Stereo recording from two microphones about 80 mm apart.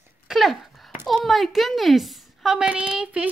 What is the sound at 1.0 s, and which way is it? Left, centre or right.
A woman's voice, centre.